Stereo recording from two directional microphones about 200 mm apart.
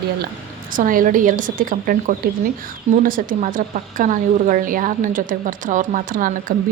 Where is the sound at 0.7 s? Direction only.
45° right (ahead or behind).